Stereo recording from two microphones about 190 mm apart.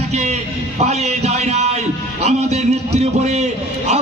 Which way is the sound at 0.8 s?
35° right (ahead or behind).